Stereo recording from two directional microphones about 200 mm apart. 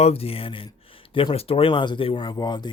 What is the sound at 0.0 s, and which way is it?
Speech, 30° left (ahead or behind).